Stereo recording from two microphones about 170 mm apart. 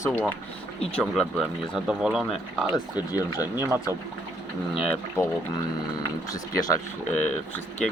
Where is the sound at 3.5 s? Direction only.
15° right (ahead or behind).